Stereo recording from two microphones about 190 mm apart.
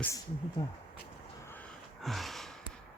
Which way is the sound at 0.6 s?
20° left (ahead or behind).